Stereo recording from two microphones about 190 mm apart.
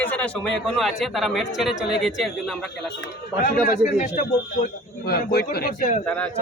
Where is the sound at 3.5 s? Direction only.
45° left (ahead or behind).